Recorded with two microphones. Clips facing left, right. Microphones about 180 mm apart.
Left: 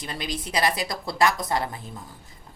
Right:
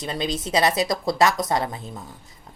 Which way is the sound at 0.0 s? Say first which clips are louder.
Right 5 dB; 25° right (ahead or behind).